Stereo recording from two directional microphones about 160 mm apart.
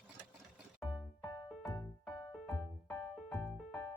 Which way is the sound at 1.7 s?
25° left (ahead or behind).